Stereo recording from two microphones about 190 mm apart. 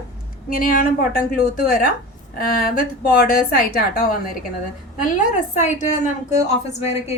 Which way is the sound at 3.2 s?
50° left (ahead or behind).